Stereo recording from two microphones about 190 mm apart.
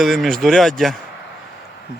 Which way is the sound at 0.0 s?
Centre (ahead or behind).